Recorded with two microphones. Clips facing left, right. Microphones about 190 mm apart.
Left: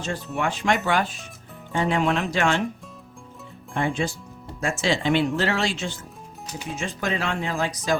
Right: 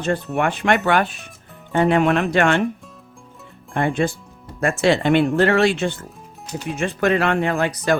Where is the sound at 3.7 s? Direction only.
55° right (ahead or behind).